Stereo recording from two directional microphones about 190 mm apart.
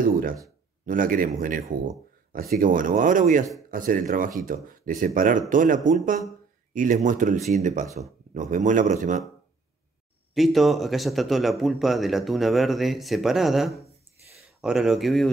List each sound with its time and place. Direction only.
0.0 s a man's voice: 45° right (ahead or behind)
10.3 s speech: centre (ahead or behind)